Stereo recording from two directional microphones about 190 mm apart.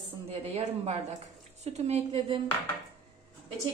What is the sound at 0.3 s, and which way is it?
A woman's voice, 35° right (ahead or behind).